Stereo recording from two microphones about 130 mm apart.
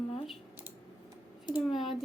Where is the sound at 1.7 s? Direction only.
Centre (ahead or behind).